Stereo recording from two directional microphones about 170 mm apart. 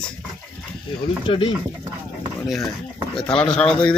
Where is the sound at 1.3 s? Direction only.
35° left (ahead or behind).